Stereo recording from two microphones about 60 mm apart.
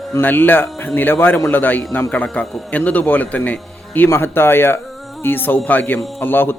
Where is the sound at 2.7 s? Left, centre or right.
Left.